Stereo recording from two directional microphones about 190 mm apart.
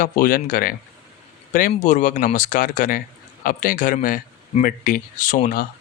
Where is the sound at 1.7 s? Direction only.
40° left (ahead or behind).